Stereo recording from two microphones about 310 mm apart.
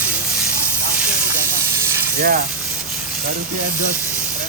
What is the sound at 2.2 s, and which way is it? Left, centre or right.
Speech, right.